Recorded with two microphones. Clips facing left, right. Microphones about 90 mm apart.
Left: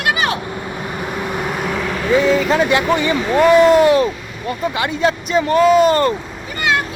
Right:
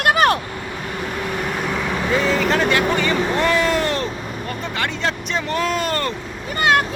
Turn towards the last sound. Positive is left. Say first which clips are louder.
# right 2 dB
turn(degrees=-45)  # may be behind; listen again after turning